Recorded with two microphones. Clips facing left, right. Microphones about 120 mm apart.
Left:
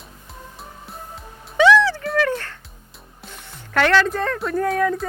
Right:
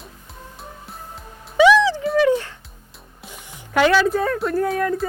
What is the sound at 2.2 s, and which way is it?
Music, 15° right (ahead or behind).